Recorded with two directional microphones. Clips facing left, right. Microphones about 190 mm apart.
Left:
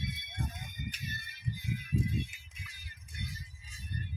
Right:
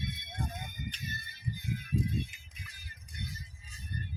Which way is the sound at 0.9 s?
10° left (ahead or behind).